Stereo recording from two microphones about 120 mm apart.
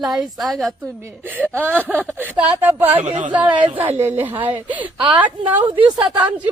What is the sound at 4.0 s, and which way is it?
A woman's voice, 20° right (ahead or behind).